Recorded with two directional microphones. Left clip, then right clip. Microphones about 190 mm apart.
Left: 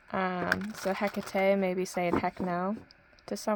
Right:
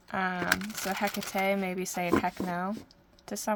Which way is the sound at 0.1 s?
50° left (ahead or behind).